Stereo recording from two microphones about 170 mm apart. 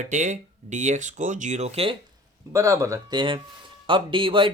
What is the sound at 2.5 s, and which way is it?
Speech, 20° right (ahead or behind).